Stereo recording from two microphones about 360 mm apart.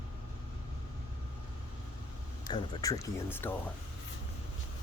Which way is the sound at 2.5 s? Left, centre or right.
Centre.